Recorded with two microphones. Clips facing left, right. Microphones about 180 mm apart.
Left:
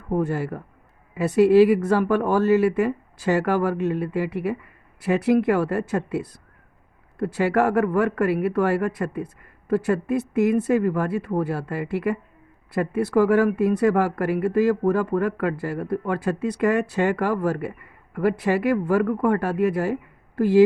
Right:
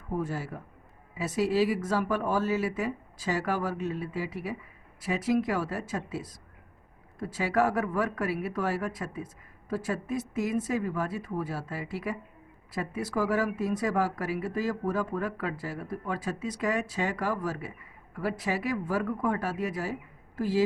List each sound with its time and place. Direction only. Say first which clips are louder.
0.1 s speech: left 8 dB; 65° left (ahead or behind)